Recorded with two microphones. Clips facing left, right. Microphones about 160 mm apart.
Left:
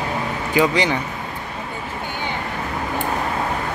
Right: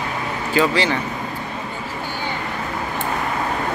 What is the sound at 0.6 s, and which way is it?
Speech, 15° left (ahead or behind).